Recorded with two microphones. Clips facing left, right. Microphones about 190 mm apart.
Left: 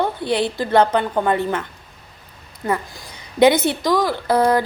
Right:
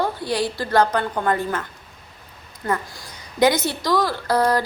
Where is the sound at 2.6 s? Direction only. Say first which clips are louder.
Left 2 dB; 15° left (ahead or behind).